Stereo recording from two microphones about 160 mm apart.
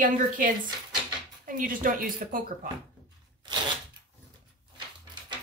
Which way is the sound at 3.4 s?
30° right (ahead or behind).